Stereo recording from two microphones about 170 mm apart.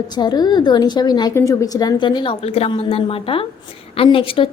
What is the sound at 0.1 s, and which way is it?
A woman's voice, 25° left (ahead or behind).